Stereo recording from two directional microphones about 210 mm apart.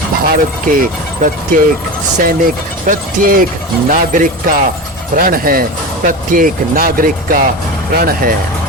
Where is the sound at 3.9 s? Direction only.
40° right (ahead or behind).